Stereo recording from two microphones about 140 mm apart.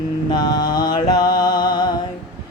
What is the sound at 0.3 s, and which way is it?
Mantra, 30° left (ahead or behind).